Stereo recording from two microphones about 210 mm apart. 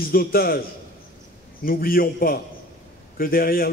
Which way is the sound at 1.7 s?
45° left (ahead or behind).